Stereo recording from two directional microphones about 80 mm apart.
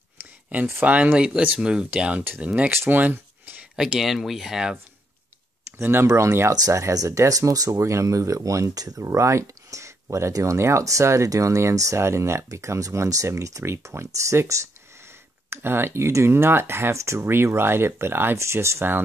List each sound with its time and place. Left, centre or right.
0.5 s speech: centre
3.7 s speech: centre
5.8 s speech: right
6.0 s speech: right
9.0 s speech: right